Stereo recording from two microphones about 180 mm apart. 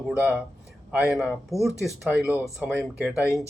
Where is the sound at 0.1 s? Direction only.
10° right (ahead or behind).